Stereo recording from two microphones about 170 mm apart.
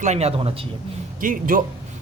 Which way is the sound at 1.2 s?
55° right (ahead or behind).